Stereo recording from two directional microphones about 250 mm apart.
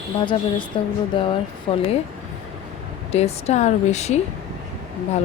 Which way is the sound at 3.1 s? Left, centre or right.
Left.